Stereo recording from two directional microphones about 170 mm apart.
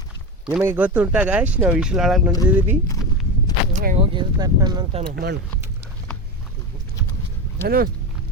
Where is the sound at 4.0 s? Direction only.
25° right (ahead or behind).